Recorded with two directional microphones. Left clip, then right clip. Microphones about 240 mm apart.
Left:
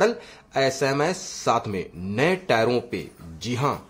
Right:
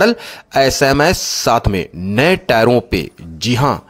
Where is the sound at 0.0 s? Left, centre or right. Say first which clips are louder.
Right 8 dB; right.